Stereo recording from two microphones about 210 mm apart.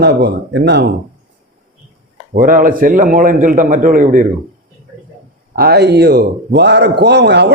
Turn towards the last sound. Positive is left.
turn(degrees=-55)  # may be behind; listen again after turning